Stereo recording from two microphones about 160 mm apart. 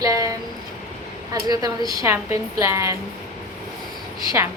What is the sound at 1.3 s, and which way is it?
A woman's voice, 25° right (ahead or behind).